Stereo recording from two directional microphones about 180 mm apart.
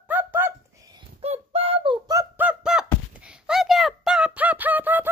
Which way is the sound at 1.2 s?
35° right (ahead or behind).